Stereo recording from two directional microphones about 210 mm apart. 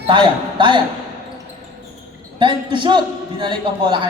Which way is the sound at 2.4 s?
25° right (ahead or behind).